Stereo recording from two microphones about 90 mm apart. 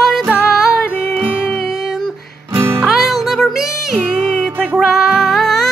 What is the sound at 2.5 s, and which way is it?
Music, 30° right (ahead or behind).